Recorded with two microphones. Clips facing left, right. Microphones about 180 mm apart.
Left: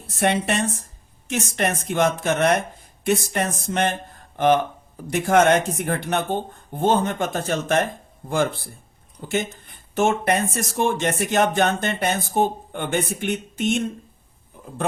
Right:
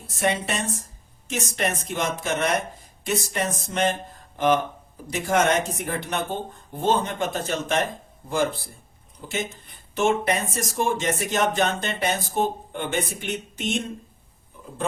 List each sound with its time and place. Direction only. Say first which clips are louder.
0.1 s speech: left 4 dB; 60° left (ahead or behind)
9.6 s speech: even; 50° left (ahead or behind)